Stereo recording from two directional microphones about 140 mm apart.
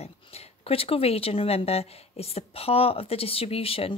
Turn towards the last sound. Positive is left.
turn(degrees=40)  # may be behind; listen again after turning